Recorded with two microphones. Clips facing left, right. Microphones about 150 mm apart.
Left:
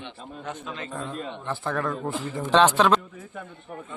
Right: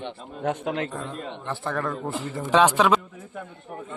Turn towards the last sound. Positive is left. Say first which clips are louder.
# even
turn(degrees=-5)  # may be behind; listen again after turning